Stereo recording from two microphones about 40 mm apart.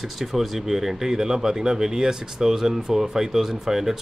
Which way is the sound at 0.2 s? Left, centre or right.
Centre.